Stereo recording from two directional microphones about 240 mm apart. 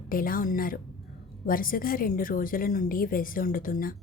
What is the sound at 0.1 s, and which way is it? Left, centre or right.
A woman's voice, left.